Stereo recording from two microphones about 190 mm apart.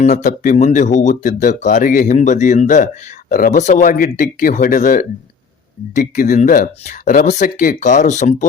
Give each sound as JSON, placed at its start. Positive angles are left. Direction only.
{"t": 0.0, "sound": "speech", "side_deg": 35}